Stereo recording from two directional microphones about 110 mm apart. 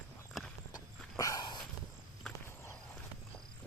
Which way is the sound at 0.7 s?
30° left (ahead or behind).